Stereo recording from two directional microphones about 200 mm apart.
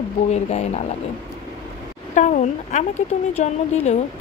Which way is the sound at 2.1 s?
40° left (ahead or behind).